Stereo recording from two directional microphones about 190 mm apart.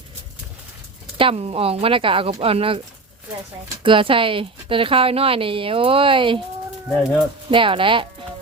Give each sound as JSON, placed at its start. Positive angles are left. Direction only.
{"t": 1.2, "sound": "speech", "side_deg": -30}
{"t": 3.8, "sound": "speech", "side_deg": -25}
{"t": 7.5, "sound": "speech", "side_deg": -25}